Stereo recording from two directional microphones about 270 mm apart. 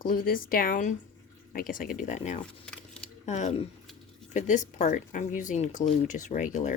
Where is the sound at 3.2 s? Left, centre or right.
Left.